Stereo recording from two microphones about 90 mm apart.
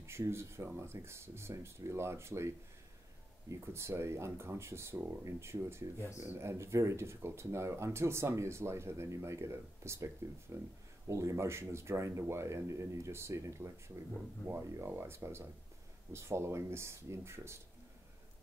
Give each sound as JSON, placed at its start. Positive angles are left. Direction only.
{"t": 0.0, "sound": "speech", "side_deg": -30}
{"t": 5.9, "sound": "speech", "side_deg": 35}
{"t": 6.2, "sound": "speech", "side_deg": -25}